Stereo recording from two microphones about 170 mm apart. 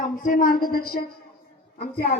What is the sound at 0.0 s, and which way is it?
A woman's voice, 55° left (ahead or behind).